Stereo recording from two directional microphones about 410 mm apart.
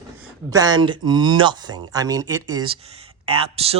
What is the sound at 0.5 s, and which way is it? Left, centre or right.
Speech, centre.